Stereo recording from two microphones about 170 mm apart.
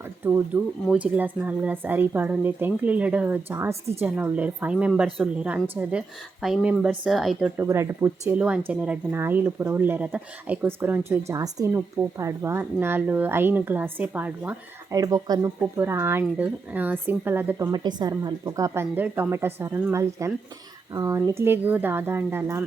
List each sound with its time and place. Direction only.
0.3 s speech: 10° right (ahead or behind)
7.6 s speech: 15° right (ahead or behind)
14.9 s speech: 20° right (ahead or behind)
17.7 s speech: 25° right (ahead or behind)